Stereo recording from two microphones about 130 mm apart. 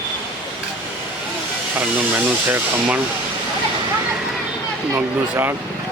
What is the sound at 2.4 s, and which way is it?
Speech, 15° right (ahead or behind).